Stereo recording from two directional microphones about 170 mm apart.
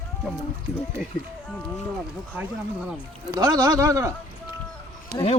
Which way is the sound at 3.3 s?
20° right (ahead or behind).